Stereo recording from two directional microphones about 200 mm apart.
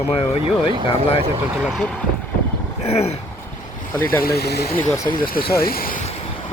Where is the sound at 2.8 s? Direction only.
30° left (ahead or behind).